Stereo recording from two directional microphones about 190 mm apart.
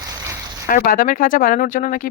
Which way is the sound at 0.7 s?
45° left (ahead or behind).